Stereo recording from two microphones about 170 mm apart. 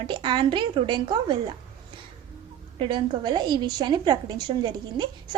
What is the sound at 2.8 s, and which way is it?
A woman's voice, 30° right (ahead or behind).